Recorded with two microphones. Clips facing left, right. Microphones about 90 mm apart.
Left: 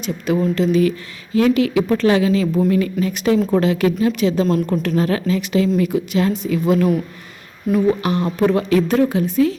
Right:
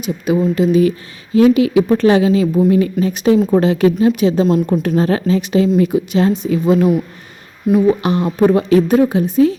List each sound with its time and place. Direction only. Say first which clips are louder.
0.0 s a woman's voice: right 3 dB; 10° right (ahead or behind)